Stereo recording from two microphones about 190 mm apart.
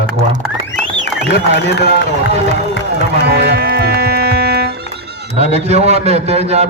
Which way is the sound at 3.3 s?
60° right (ahead or behind).